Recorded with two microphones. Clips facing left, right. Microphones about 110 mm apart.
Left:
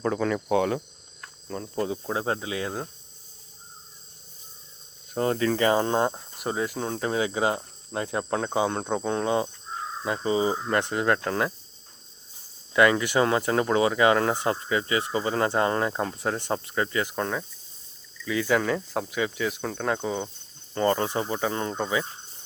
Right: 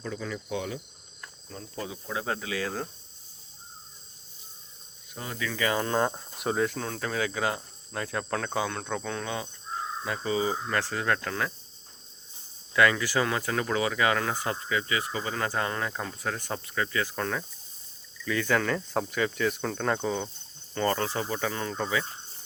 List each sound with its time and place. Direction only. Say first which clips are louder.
0.0 s speech: left 9 dB; 60° left (ahead or behind)
1.5 s cricket: left 9 dB; 50° left (ahead or behind); by 2.8 s 20° left (ahead or behind)
5.1 s cricket: left 11 dB; 45° left (ahead or behind); by 6.0 s 30° left (ahead or behind)
6.0 s speech: left 2 dB; 10° left (ahead or behind)
6.3 s speech: right 1 dB; centre (ahead or behind)
6.7 s speech: left 4 dB; 25° left (ahead or behind)
12.7 s speech: left 3 dB; 25° left (ahead or behind)
20.7 s speech: left 4 dB; 20° left (ahead or behind)